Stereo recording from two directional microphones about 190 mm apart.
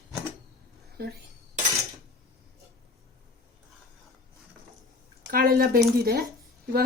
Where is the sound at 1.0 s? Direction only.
55° right (ahead or behind).